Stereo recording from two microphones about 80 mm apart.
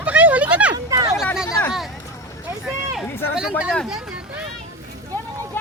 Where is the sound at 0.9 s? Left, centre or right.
Right.